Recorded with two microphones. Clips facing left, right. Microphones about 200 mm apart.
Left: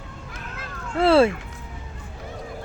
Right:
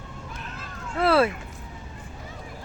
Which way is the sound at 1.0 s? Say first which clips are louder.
Left 4 dB; 25° left (ahead or behind).